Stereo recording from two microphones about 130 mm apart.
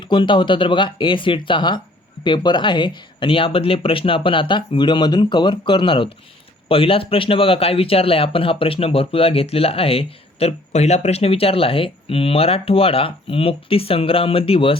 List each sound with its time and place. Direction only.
0.1 s a man's voice: 40° left (ahead or behind)